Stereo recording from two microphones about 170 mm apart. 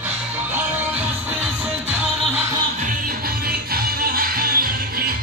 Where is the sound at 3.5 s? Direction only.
60° right (ahead or behind).